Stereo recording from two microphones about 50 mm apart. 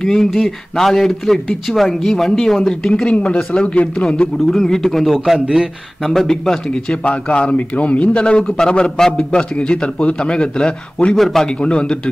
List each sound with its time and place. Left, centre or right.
0.0 s speech: centre
4.5 s speech: centre
5.0 s a man's voice: centre
6.0 s speech: centre
6.9 s a man's voice: left
11.1 s a man's voice: centre
11.6 s a man's voice: centre